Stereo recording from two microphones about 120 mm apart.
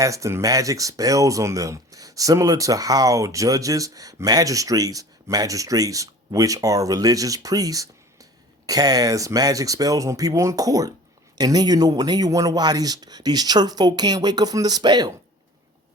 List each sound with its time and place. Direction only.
0.0 s speech: 25° right (ahead or behind)